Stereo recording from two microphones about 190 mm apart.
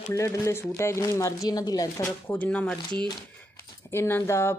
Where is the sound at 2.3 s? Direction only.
5° left (ahead or behind).